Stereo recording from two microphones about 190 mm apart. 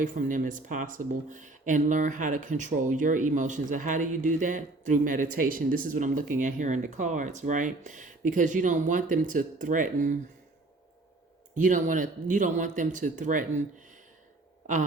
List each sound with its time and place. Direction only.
0.0 s speech: 45° right (ahead or behind)
11.6 s speech: 45° right (ahead or behind)